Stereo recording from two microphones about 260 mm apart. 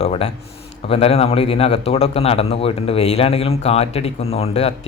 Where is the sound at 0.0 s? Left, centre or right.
Left.